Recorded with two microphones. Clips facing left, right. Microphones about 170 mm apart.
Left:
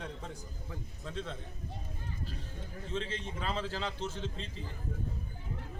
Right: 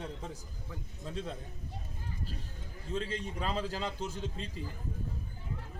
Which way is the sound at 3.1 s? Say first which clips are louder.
Right 2 dB; 40° right (ahead or behind).